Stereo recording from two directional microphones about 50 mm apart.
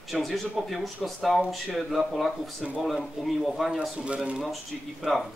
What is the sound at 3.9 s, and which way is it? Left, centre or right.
Speech, right.